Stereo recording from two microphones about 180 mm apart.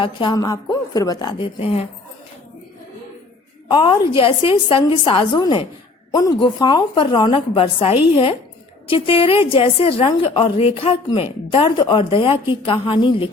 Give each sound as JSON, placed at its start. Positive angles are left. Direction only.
{"t": 0.0, "sound": "a woman's voice", "side_deg": 25}
{"t": 3.7, "sound": "a woman's voice", "side_deg": 25}